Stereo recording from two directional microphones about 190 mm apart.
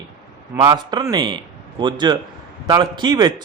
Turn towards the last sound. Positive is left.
turn(degrees=-25)  # may be behind; listen again after turning